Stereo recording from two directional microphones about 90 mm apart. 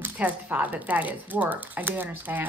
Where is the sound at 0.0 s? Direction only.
20° right (ahead or behind).